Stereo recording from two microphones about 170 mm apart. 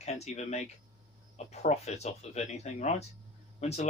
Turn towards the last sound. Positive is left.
turn(degrees=40)  # may be behind; listen again after turning